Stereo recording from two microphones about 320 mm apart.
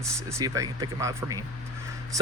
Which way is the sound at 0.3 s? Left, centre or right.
Centre.